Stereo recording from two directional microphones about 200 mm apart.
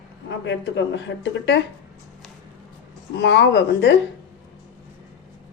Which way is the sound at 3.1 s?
60° left (ahead or behind).